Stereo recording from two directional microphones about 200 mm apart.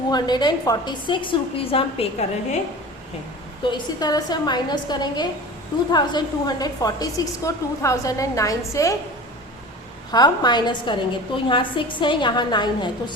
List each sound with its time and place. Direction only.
0.1 s a woman's voice: 20° left (ahead or behind)
3.7 s a woman's voice: 20° left (ahead or behind)
10.1 s a woman's voice: 20° left (ahead or behind)